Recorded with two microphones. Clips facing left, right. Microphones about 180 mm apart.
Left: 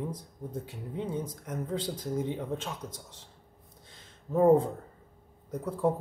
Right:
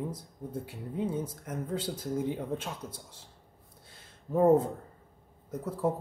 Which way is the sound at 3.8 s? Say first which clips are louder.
Right 1 dB; 10° right (ahead or behind).